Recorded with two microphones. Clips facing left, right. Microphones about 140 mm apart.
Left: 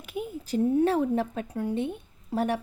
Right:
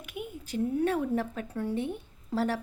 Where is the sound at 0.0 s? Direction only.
35° left (ahead or behind).